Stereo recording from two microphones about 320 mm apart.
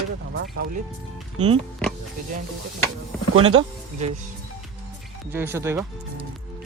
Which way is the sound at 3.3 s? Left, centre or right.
Centre.